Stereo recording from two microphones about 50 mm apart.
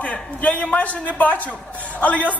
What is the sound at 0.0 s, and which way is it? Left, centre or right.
A woman's voice, left.